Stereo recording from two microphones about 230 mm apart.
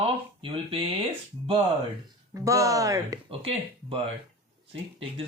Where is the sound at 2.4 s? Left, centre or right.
Centre.